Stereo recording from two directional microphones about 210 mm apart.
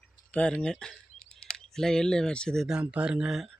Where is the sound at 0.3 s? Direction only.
5° left (ahead or behind).